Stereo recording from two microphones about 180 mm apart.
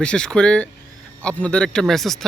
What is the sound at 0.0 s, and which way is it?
A man's voice, 5° left (ahead or behind).